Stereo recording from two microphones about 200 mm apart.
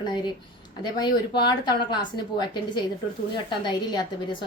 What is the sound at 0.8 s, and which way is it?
A woman's voice, 20° left (ahead or behind).